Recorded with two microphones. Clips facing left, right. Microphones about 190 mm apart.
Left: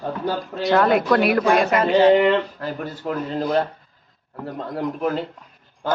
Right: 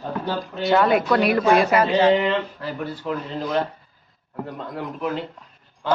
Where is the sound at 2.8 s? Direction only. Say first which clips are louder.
Even; 45° left (ahead or behind).